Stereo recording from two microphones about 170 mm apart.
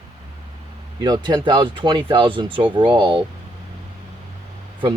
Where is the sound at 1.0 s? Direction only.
25° right (ahead or behind).